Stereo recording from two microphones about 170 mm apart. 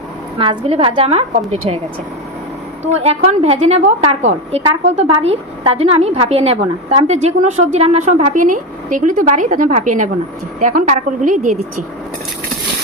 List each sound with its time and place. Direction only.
0.3 s a woman's voice: 35° right (ahead or behind)
2.9 s a woman's voice: 40° right (ahead or behind)